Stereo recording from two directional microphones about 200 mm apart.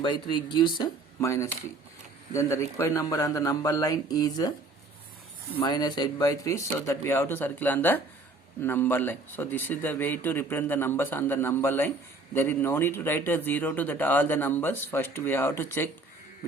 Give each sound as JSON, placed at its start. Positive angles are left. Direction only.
{"t": 0.0, "sound": "speech", "side_deg": 25}
{"t": 5.5, "sound": "speech", "side_deg": 20}